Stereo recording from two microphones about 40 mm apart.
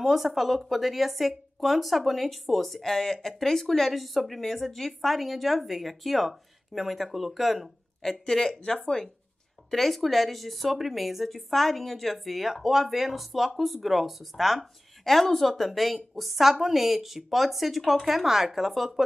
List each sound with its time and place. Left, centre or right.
0.0 s speech: centre
8.0 s speech: centre
8.5 s speech: left
9.7 s speech: centre